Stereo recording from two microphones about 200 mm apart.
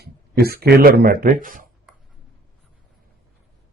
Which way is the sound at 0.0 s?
50° right (ahead or behind).